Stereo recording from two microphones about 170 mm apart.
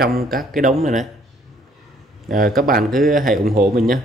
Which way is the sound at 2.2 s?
55° right (ahead or behind).